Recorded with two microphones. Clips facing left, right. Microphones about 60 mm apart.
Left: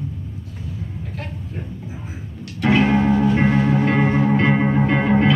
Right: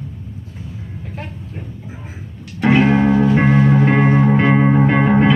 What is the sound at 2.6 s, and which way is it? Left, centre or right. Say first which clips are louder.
Music: right 3 dB; right.